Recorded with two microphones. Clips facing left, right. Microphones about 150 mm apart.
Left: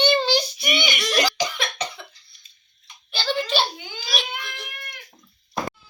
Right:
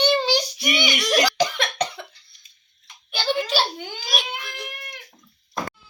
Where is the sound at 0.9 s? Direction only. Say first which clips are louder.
Right 4 dB; 10° right (ahead or behind).